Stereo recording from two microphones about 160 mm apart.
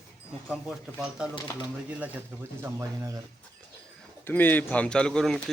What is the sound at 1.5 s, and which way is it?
Speech, 20° left (ahead or behind).